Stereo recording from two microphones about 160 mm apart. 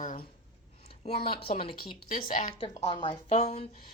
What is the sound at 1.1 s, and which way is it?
Speech, 40° left (ahead or behind).